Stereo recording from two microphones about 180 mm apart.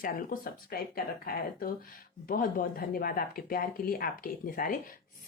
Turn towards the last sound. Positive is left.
turn(degrees=50)  # may be behind; listen again after turning